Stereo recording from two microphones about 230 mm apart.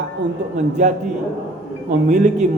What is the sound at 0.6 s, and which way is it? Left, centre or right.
A man's voice, right.